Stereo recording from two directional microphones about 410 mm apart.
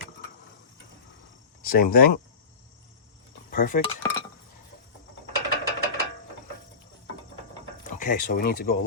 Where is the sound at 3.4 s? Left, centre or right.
Centre.